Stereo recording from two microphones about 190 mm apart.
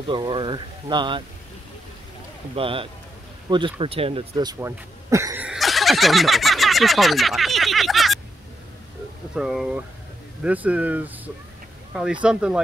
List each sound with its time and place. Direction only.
0.1 s speech: 25° right (ahead or behind)
2.5 s speech: 30° right (ahead or behind); by 8.2 s centre (ahead or behind)
9.3 s speech: 5° right (ahead or behind)